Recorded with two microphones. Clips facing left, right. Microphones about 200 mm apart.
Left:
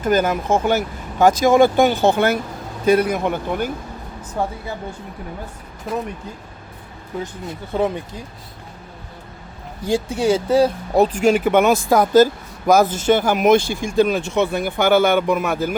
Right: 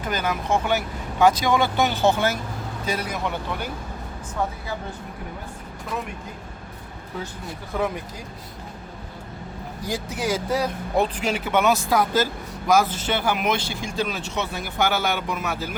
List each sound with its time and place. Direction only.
0.0 s speech: 45° left (ahead or behind)
7.4 s speech: 25° left (ahead or behind)
9.8 s speech: 30° left (ahead or behind); by 15.7 s 50° left (ahead or behind)